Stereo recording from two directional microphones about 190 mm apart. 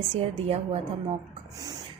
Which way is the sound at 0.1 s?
35° right (ahead or behind).